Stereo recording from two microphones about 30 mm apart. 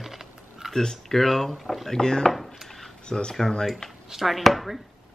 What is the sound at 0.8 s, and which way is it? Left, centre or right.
Speech, centre.